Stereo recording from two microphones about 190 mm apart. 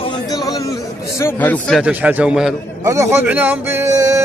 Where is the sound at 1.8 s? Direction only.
10° right (ahead or behind).